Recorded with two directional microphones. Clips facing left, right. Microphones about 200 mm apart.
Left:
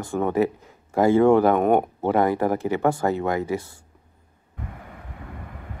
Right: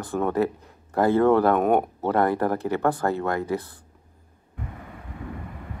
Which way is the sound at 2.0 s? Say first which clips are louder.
Left 2 dB; 15° left (ahead or behind).